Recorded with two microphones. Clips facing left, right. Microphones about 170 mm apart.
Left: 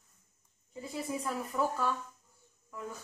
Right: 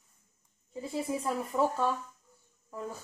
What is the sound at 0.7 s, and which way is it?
Speech, 25° right (ahead or behind).